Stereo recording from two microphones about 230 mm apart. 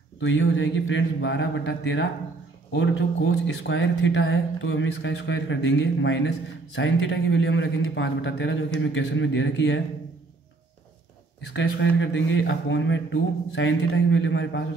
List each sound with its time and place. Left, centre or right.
0.2 s speech: left
11.5 s speech: left